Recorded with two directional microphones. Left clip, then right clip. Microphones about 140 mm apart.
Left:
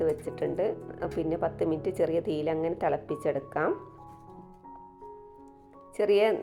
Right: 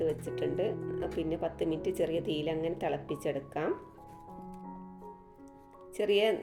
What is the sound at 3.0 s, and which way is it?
Speech, 45° left (ahead or behind).